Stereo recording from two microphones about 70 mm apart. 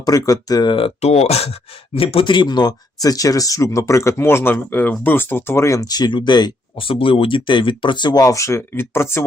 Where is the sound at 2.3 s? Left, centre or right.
Left.